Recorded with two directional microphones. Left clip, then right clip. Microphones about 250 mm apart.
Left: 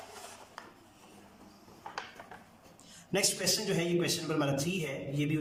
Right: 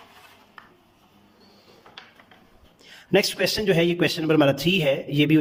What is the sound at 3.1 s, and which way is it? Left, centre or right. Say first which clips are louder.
Speech: right 10 dB; right.